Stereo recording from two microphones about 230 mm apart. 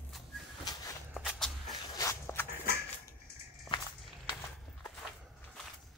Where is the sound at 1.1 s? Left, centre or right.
Centre.